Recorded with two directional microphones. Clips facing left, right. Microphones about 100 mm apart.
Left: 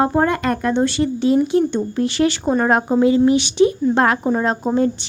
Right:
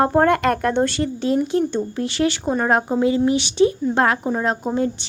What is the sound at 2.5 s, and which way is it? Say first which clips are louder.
Speech: left 4 dB; 20° left (ahead or behind).